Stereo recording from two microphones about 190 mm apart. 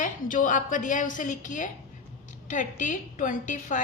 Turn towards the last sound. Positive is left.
turn(degrees=40)  # may be behind; listen again after turning